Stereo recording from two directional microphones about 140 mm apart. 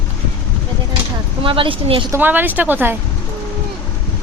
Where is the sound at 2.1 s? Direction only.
15° right (ahead or behind).